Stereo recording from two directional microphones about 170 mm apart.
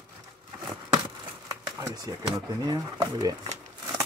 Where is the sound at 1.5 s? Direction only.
20° right (ahead or behind).